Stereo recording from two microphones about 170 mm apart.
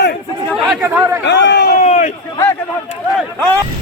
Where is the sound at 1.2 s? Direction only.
90° left.